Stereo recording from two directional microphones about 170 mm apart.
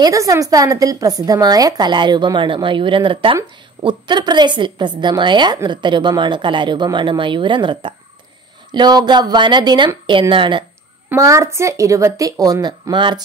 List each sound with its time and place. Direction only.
0.0 s a woman's voice: 20° right (ahead or behind)
11.1 s a woman's voice: 15° right (ahead or behind)